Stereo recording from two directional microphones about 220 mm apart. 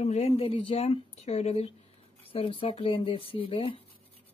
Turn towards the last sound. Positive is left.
turn(degrees=25)  # may be behind; listen again after turning